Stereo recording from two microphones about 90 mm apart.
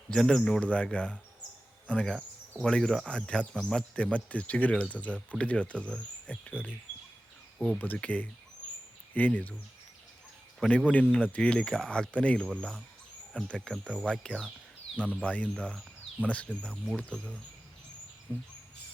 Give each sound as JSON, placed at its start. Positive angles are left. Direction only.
{"t": 0.1, "sound": "speech", "side_deg": 5}
{"t": 10.6, "sound": "speech", "side_deg": 10}
{"t": 14.9, "sound": "speech", "side_deg": -10}
{"t": 15.2, "sound": "speech", "side_deg": 15}
{"t": 18.3, "sound": "speech", "side_deg": 20}